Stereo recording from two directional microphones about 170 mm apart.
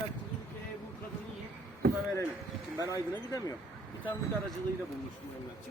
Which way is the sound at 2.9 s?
20° left (ahead or behind).